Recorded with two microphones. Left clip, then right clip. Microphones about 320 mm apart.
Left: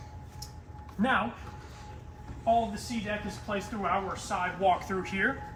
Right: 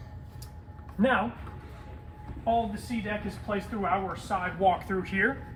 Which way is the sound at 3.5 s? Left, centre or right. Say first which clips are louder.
Right 2 dB; centre.